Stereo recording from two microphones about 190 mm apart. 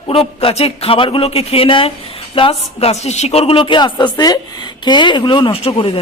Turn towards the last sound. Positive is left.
turn(degrees=25)  # may be behind; listen again after turning